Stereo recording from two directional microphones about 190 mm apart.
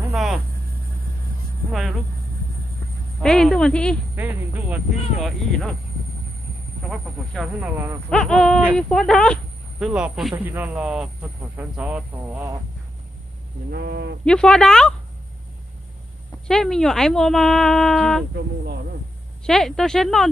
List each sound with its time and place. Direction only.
0.1 s vehicle: centre (ahead or behind)
1.7 s speech: centre (ahead or behind)
3.2 s speech: centre (ahead or behind)
4.1 s speech: 10° right (ahead or behind)
5.2 s speech: centre (ahead or behind)
6.8 s speech: centre (ahead or behind)
7.7 s speech: 10° right (ahead or behind)
8.1 s speech: 5° left (ahead or behind); by 12.5 s 10° right (ahead or behind)
13.7 s speech: 55° right (ahead or behind)
14.2 s speech: 5° left (ahead or behind)
16.4 s speech: 5° left (ahead or behind)
19.4 s speech: centre (ahead or behind)